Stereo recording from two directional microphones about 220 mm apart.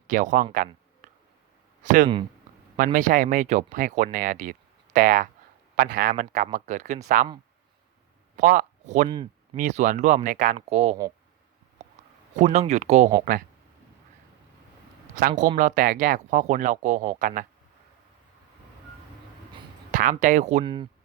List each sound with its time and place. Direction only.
0.1 s speech: 35° right (ahead or behind)
0.5 s a sound: 40° right (ahead or behind)
1.8 s speech: 35° right (ahead or behind)
8.4 s speech: 40° right (ahead or behind)
11.8 s a sound: 30° right (ahead or behind)
13.1 s speech: 40° right (ahead or behind)
15.4 s speech: 35° right (ahead or behind)
19.9 s speech: 35° right (ahead or behind)